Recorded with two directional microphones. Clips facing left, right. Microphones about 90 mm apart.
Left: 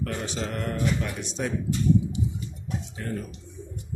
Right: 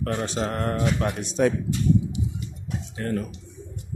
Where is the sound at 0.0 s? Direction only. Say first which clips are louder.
Right 4 dB; 40° right (ahead or behind).